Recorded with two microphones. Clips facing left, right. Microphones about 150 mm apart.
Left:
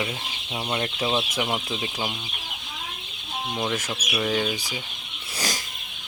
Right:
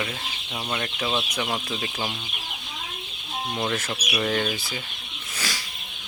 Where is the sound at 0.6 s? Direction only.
25° left (ahead or behind).